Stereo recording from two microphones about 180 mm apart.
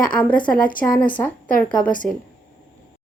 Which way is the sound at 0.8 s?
20° left (ahead or behind).